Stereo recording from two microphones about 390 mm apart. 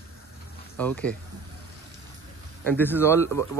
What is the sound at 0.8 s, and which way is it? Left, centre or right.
Speech, centre.